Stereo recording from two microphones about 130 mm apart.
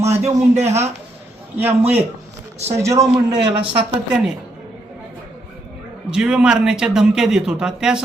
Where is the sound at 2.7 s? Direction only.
25° right (ahead or behind).